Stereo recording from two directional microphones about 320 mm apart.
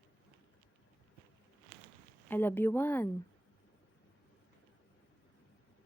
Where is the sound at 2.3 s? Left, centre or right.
Centre.